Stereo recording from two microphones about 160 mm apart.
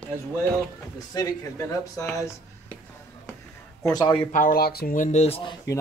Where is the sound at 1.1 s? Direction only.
20° left (ahead or behind).